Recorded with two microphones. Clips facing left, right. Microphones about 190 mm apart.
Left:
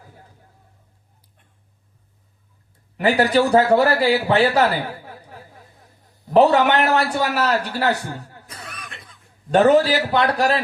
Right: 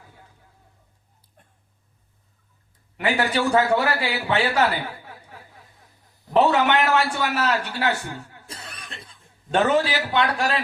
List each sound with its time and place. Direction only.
3.0 s a man's voice: 40° left (ahead or behind)
6.3 s a man's voice: 35° left (ahead or behind)
8.4 s cough: 30° right (ahead or behind)
9.5 s a man's voice: 40° left (ahead or behind)